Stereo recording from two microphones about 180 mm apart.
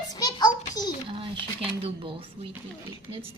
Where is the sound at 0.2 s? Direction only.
20° left (ahead or behind).